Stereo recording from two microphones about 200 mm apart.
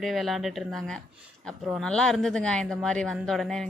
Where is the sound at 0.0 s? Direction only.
Centre (ahead or behind).